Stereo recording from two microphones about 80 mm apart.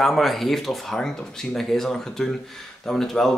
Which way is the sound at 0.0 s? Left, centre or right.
Centre.